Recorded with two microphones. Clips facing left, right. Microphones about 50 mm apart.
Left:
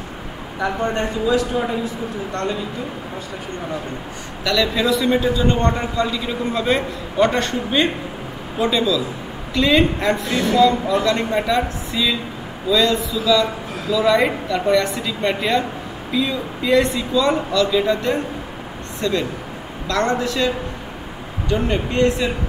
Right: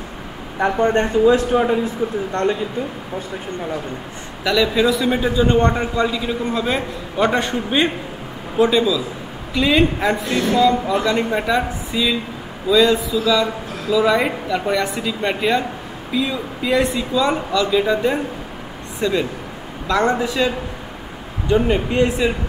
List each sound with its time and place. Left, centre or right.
0.6 s speech: right
4.5 s a man's voice: centre